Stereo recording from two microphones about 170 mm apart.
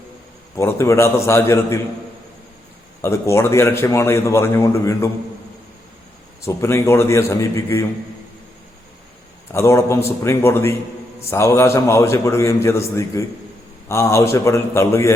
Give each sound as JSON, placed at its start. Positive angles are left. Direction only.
{"t": 0.5, "sound": "a man's voice", "side_deg": 15}
{"t": 3.0, "sound": "a man's voice", "side_deg": 15}
{"t": 6.4, "sound": "a man's voice", "side_deg": 15}
{"t": 9.5, "sound": "a man's voice", "side_deg": 15}